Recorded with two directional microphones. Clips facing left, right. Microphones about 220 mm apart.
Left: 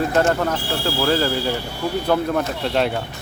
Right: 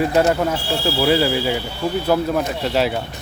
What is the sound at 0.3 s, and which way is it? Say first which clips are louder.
Speech: right 2 dB; 10° right (ahead or behind).